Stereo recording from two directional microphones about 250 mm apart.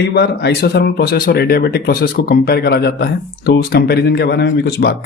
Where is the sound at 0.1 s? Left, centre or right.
Left.